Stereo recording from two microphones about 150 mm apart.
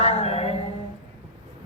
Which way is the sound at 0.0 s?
40° left (ahead or behind).